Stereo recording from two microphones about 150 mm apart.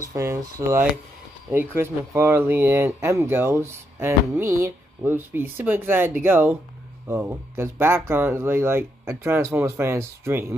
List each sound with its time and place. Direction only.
0.0 s speech: 20° right (ahead or behind)